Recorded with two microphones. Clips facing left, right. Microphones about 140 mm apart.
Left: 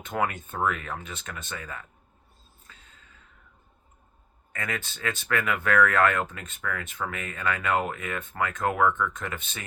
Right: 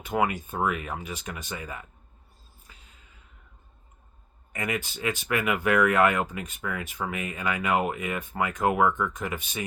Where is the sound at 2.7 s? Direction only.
15° right (ahead or behind).